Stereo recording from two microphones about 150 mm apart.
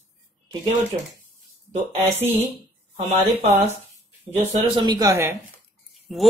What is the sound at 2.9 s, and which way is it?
Speech, 45° right (ahead or behind).